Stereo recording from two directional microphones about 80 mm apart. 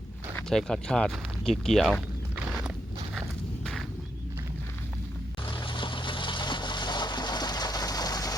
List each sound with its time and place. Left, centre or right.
0.5 s speech: centre
5.5 s boat: left